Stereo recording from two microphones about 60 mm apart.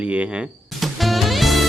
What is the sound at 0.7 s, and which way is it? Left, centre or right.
Music, centre.